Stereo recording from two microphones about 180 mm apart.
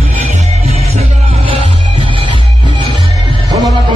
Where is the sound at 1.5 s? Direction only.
30° right (ahead or behind).